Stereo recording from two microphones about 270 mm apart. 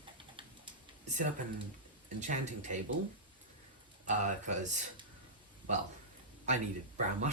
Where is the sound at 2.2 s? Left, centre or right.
Right.